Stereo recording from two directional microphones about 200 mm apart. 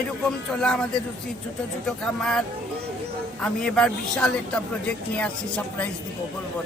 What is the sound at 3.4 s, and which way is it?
Speech, 5° left (ahead or behind).